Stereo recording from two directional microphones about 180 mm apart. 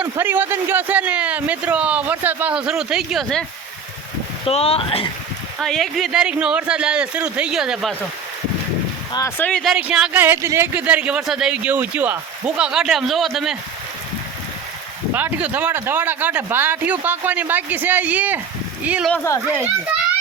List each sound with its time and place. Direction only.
0.0 s speech: 10° right (ahead or behind)
4.4 s speech: 35° left (ahead or behind)
5.5 s speech: centre (ahead or behind)
9.1 s speech: 15° left (ahead or behind)
9.5 s speech: centre (ahead or behind)
15.1 s speech: 10° right (ahead or behind)
19.1 s speech: 10° left (ahead or behind)